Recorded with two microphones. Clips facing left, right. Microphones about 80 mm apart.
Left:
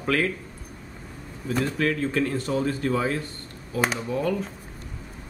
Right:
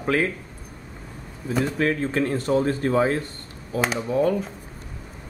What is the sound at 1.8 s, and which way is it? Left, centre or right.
Speech, right.